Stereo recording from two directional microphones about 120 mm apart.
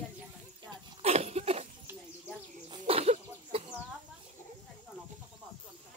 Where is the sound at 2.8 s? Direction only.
55° right (ahead or behind).